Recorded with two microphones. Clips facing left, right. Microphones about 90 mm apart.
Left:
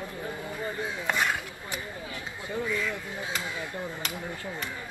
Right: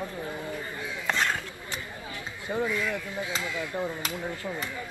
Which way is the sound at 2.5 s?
50° right (ahead or behind).